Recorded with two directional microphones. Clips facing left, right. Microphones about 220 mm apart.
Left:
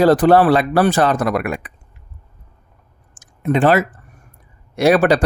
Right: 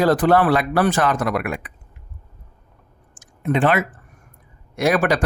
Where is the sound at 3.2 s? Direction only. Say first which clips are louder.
Left 3 dB; 40° left (ahead or behind).